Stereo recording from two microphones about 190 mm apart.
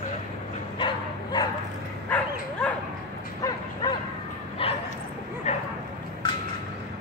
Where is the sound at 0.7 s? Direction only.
25° left (ahead or behind).